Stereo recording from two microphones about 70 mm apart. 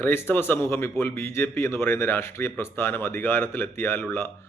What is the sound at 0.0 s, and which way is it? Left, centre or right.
A man's voice, left.